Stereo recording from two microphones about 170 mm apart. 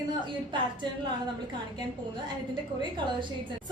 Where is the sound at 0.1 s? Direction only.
30° right (ahead or behind).